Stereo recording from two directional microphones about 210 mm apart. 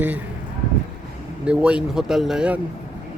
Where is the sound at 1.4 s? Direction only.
5° right (ahead or behind).